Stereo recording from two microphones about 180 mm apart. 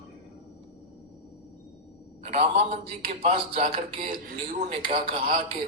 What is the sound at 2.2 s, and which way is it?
A man's voice, 35° right (ahead or behind).